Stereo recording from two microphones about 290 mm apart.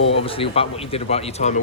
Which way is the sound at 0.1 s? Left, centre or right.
Centre.